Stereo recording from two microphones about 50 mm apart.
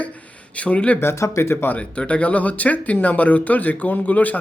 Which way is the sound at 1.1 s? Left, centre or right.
Left.